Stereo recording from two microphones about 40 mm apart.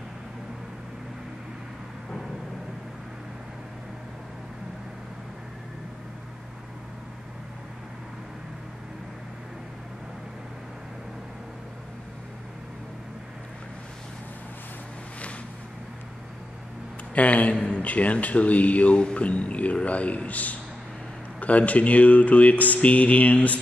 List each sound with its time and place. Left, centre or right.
17.1 s speech: left